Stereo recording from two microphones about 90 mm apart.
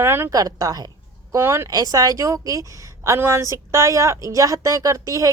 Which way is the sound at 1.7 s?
45° right (ahead or behind).